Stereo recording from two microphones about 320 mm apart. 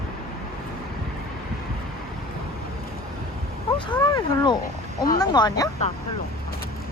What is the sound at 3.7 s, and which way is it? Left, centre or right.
Speech, centre.